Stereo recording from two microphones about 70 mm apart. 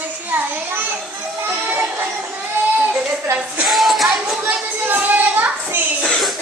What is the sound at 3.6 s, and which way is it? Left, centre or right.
Music, centre.